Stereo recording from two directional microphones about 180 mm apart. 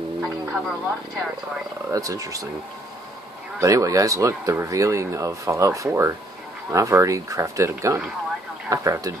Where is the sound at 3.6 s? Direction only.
20° right (ahead or behind).